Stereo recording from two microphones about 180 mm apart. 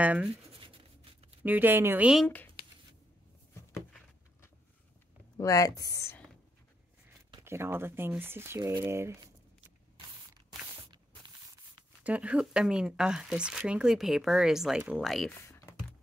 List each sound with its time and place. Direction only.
0.0 s speech: 10° right (ahead or behind)
0.5 s writing: 30° right (ahead or behind)
1.4 s speech: 10° right (ahead or behind)
2.2 s speech: 5° left (ahead or behind)
5.4 s speech: 20° left (ahead or behind)
7.4 s speech: 15° right (ahead or behind)
12.0 s speech: 5° right (ahead or behind)
15.4 s computer keyboard: 15° left (ahead or behind)